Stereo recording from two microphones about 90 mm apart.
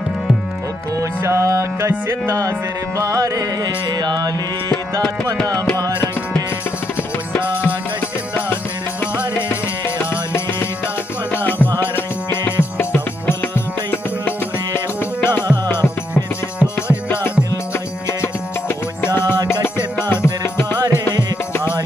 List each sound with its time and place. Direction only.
1.2 s music: 30° right (ahead or behind)
4.0 s music: 50° right (ahead or behind)
11.8 s music: 25° left (ahead or behind)
19.0 s music: 25° left (ahead or behind)